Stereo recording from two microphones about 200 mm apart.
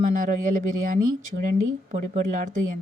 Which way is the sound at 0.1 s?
40° right (ahead or behind).